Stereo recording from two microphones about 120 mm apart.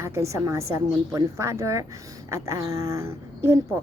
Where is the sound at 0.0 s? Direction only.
25° right (ahead or behind).